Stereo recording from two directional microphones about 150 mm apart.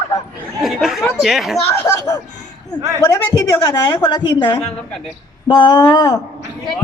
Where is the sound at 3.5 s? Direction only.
25° left (ahead or behind).